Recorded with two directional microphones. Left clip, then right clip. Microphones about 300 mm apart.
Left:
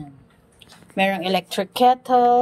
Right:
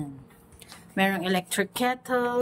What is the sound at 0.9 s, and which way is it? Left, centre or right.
Speech, centre.